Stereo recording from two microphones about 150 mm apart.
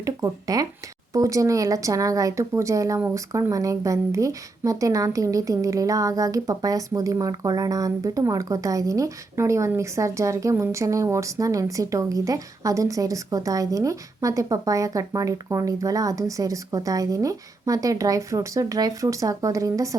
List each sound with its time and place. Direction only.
0.0 s speech: 25° right (ahead or behind)